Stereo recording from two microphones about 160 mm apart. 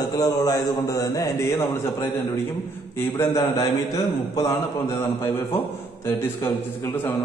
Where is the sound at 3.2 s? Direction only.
20° left (ahead or behind).